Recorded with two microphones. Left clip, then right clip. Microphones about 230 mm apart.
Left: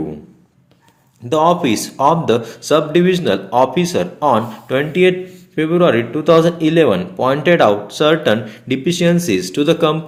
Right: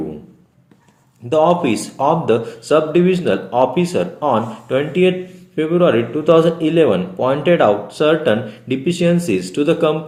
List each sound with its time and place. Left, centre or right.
1.3 s speech: left